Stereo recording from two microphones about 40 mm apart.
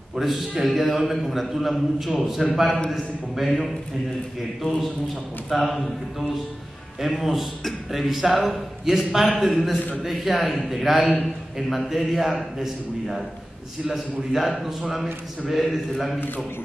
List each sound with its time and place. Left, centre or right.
0.1 s a man's voice: centre
4.6 s a man's voice: centre